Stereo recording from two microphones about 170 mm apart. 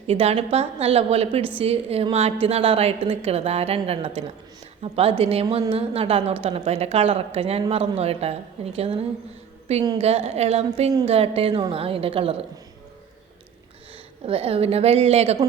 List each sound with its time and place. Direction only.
0.1 s a woman's voice: 35° right (ahead or behind)
10.0 s a woman's voice: 40° right (ahead or behind)
14.3 s a woman's voice: 35° right (ahead or behind)